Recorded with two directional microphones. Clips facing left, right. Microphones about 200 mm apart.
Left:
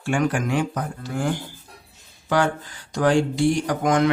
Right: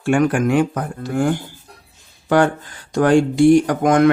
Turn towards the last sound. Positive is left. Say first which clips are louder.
# right 6 dB
turn(degrees=-55)  # may be behind; listen again after turning